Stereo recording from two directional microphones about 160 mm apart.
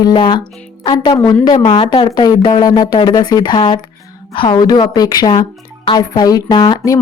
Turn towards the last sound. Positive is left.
turn(degrees=20)  # may be behind; listen again after turning